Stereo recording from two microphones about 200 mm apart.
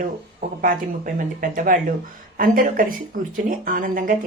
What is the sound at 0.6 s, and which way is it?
Speech, 45° right (ahead or behind).